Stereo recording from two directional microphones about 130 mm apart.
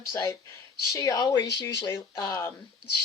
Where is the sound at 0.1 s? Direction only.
25° left (ahead or behind).